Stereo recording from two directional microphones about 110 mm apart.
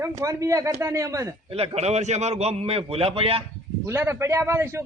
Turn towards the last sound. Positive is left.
turn(degrees=-25)  # may be behind; listen again after turning